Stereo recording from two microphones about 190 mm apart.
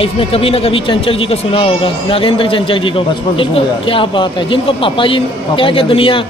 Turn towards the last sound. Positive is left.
turn(degrees=25)  # may be behind; listen again after turning